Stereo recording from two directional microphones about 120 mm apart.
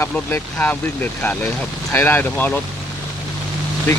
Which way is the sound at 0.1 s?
15° left (ahead or behind).